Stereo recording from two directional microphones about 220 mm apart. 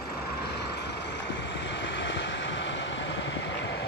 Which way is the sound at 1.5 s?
55° left (ahead or behind).